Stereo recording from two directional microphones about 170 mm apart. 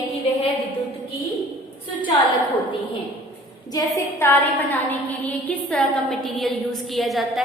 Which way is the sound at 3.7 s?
15° left (ahead or behind).